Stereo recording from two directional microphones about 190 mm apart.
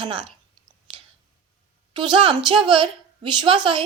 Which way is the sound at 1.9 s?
25° right (ahead or behind).